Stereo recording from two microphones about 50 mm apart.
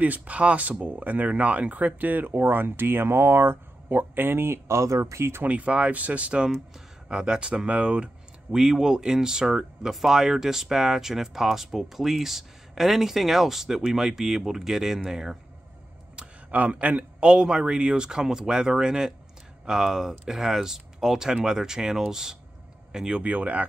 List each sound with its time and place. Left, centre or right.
0.0 s speech: right
5.4 s speech: right; by 15.3 s centre
16.4 s a man's voice: right
17.3 s speech: centre